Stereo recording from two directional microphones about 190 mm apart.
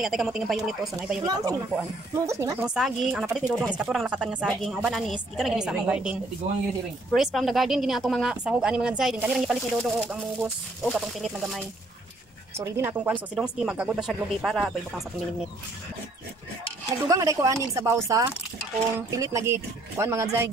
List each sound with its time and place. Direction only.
0.0 s a woman's voice: centre (ahead or behind)
1.2 s speech: 20° right (ahead or behind)
2.6 s a woman's voice: 5° right (ahead or behind)
12.5 s a woman's voice: 15° right (ahead or behind)
17.1 s speech: 15° right (ahead or behind)